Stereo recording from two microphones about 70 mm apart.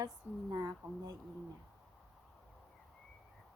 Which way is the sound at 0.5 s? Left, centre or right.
Right.